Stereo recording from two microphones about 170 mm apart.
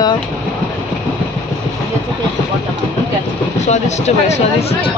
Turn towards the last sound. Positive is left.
turn(degrees=40)  # may be behind; listen again after turning